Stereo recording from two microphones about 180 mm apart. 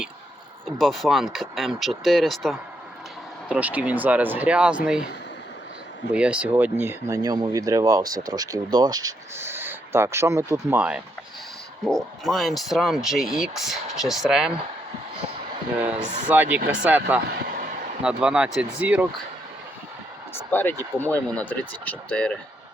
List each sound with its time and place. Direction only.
0.8 s speech: centre (ahead or behind)
6.1 s speech: 5° right (ahead or behind)
16.3 s speech: 10° right (ahead or behind)
17.3 s a sound: 50° right (ahead or behind)
18.0 s speech: 5° right (ahead or behind)
20.3 s speech: 10° left (ahead or behind)